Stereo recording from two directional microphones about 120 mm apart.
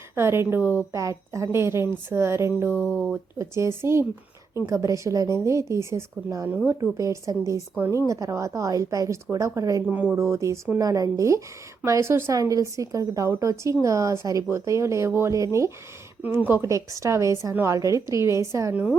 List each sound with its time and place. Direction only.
0.2 s a woman's voice: 20° right (ahead or behind)
2.7 s speech: 15° left (ahead or behind)
3.3 s a woman's voice: 25° right (ahead or behind)
9.8 s a woman's voice: 15° right (ahead or behind)
16.2 s a woman's voice: 15° right (ahead or behind)
18.7 s a woman's voice: 10° right (ahead or behind)